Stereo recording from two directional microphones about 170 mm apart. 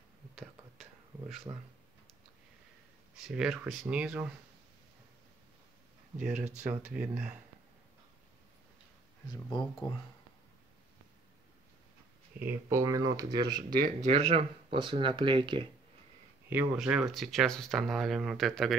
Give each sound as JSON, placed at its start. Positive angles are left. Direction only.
{"t": 1.5, "sound": "speech", "side_deg": -25}
{"t": 3.2, "sound": "speech", "side_deg": -5}
{"t": 6.3, "sound": "speech", "side_deg": -45}
{"t": 6.7, "sound": "speech", "side_deg": -10}
{"t": 9.5, "sound": "speech", "side_deg": 0}
{"t": 12.4, "sound": "speech", "side_deg": -15}
{"t": 13.7, "sound": "speech", "side_deg": -50}
{"t": 16.4, "sound": "speech", "side_deg": -10}